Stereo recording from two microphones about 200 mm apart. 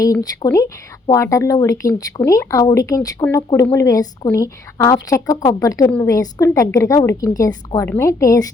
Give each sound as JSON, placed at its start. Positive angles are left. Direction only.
{"t": 0.0, "sound": "speech", "side_deg": 15}